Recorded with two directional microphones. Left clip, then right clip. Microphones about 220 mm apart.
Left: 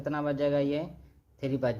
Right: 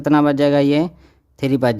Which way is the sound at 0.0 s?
45° right (ahead or behind).